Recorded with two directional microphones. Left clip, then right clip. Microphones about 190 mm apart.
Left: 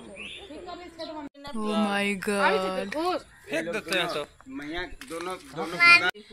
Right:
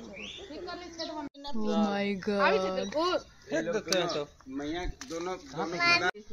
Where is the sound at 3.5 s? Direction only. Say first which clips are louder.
Left 1 dB; 25° right (ahead or behind).